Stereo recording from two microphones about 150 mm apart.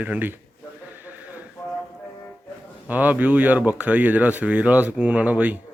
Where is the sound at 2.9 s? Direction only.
10° right (ahead or behind).